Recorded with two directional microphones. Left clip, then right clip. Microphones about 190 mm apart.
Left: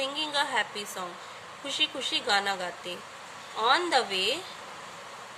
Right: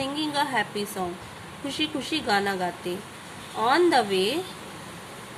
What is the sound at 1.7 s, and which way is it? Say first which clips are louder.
A woman's voice: even; 20° left (ahead or behind).